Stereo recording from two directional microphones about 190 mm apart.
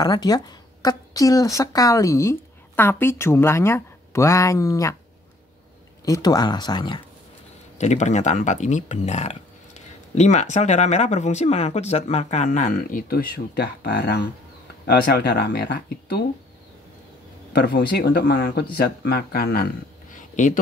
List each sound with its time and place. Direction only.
0.0 s a woman's voice: 20° left (ahead or behind)
6.0 s speech: 20° left (ahead or behind)
7.7 s speech: 35° left (ahead or behind); by 16.3 s 60° left (ahead or behind)
17.5 s speech: 55° left (ahead or behind)